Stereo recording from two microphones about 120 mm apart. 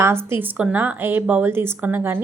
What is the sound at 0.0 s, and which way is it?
A woman's voice, 20° right (ahead or behind).